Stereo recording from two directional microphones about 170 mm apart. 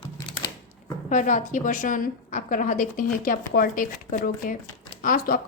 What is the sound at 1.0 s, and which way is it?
A woman's voice, 45° left (ahead or behind).